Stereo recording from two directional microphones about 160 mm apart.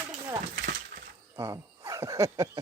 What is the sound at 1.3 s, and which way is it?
Speech, 20° right (ahead or behind).